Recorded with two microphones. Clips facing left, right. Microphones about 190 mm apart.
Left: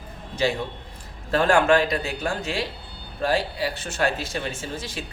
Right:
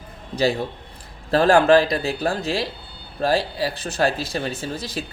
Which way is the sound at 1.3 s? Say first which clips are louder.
Right 4 dB; 35° right (ahead or behind).